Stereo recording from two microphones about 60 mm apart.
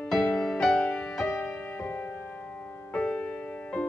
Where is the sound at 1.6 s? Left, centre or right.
Left.